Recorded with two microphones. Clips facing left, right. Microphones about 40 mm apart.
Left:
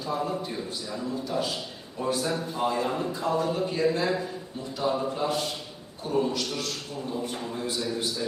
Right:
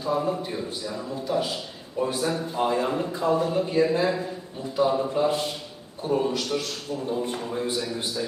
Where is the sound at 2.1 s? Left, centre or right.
Right.